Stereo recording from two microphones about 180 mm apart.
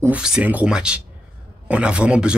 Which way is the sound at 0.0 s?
5° right (ahead or behind).